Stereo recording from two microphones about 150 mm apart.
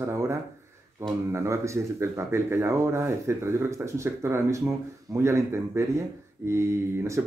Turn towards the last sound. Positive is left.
turn(degrees=-20)  # may be behind; listen again after turning